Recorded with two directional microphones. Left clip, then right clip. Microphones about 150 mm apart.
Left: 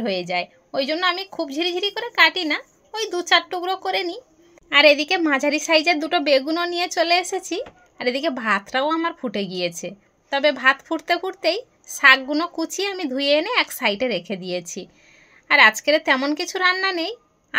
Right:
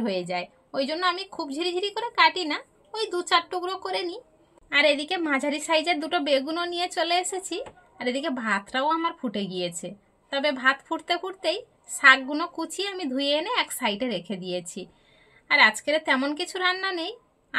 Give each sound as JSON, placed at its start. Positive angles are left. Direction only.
{"t": 0.0, "sound": "a woman's voice", "side_deg": 25}